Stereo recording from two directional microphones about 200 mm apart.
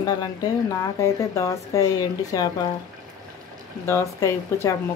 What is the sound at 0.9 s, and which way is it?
Speech, 15° left (ahead or behind).